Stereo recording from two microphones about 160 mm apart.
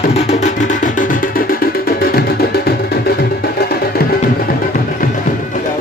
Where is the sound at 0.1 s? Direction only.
45° left (ahead or behind); by 4.5 s 70° left (ahead or behind).